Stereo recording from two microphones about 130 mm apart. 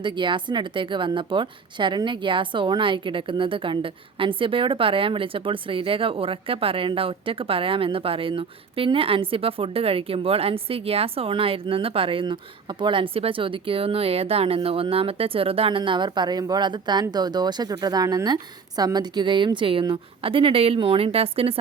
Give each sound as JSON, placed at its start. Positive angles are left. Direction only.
{"t": 0.0, "sound": "a woman's voice", "side_deg": -40}